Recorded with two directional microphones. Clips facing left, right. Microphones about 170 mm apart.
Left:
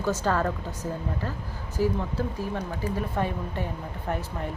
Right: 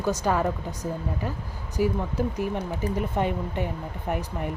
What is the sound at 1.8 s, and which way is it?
Speech, 15° right (ahead or behind).